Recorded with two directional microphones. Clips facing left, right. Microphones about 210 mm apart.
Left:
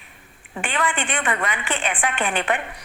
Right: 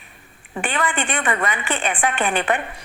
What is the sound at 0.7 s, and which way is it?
A woman's voice, 40° right (ahead or behind).